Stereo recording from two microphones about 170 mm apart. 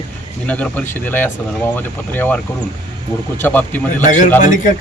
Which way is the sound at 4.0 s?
45° left (ahead or behind).